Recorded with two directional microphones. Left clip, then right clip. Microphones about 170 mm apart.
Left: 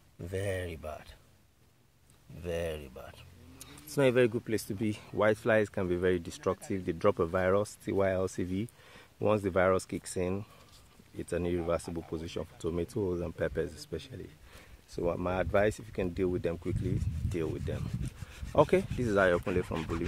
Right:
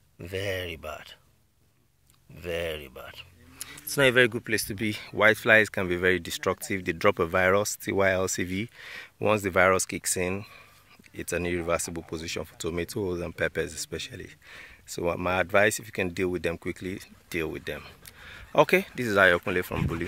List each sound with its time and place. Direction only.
0.2 s speech: 15° right (ahead or behind)
2.4 s speech: 5° right (ahead or behind)
11.9 s speech: 25° right (ahead or behind)
12.2 s speech: 10° right (ahead or behind)
19.6 s speech: 40° right (ahead or behind)